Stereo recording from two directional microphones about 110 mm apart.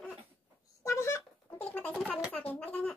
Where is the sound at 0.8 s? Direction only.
25° left (ahead or behind).